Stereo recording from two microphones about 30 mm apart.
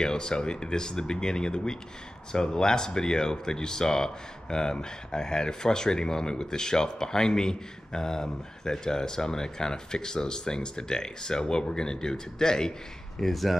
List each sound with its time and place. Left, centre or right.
0.0 s speech: left
13.2 s speech: centre